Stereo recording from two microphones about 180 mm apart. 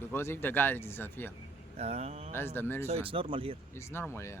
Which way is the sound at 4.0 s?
15° left (ahead or behind).